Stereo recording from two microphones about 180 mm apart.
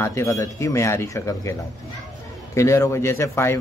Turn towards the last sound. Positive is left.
turn(degrees=15)  # may be behind; listen again after turning